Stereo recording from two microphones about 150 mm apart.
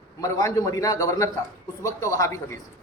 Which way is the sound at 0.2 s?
25° left (ahead or behind).